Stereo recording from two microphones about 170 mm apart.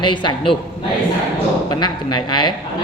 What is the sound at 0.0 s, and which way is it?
Speech, 30° left (ahead or behind).